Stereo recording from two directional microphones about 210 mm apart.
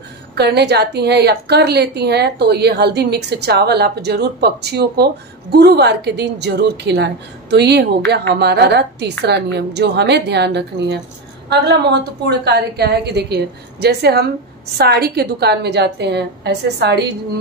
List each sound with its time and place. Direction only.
0.4 s a woman's voice: 50° right (ahead or behind)